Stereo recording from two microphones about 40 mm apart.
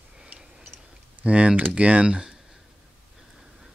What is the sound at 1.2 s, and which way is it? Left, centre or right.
Speech, right.